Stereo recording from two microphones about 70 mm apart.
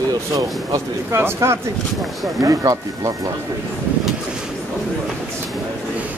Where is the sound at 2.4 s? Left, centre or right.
Right.